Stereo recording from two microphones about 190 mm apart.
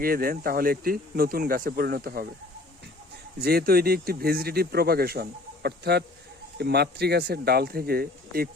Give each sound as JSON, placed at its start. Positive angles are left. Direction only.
{"t": 0.0, "sound": "speech", "side_deg": -50}
{"t": 3.4, "sound": "speech", "side_deg": -55}